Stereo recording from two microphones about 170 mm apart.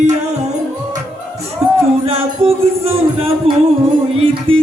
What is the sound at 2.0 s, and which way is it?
Music, 35° right (ahead or behind).